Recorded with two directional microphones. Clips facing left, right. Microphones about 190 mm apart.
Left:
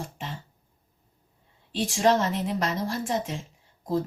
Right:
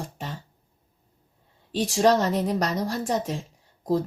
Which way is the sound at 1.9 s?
40° right (ahead or behind).